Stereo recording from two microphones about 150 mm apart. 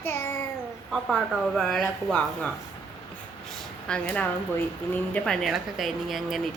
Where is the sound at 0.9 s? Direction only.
Centre (ahead or behind).